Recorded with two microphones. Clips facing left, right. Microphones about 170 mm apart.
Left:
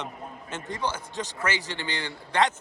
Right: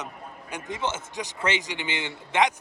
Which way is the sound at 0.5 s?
20° right (ahead or behind).